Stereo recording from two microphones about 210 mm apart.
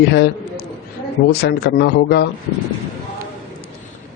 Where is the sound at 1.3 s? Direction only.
50° left (ahead or behind).